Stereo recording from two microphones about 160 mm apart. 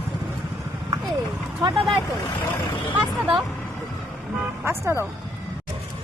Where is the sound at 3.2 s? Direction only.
5° right (ahead or behind).